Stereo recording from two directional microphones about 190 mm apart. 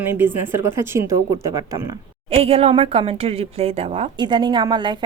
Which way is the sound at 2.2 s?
30° right (ahead or behind).